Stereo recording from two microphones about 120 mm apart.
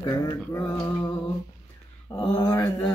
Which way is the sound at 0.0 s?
30° left (ahead or behind).